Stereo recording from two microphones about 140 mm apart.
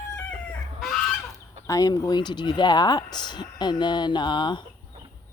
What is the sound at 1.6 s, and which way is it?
Speech, 25° left (ahead or behind).